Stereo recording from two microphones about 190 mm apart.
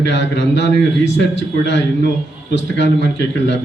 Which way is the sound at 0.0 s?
65° left (ahead or behind).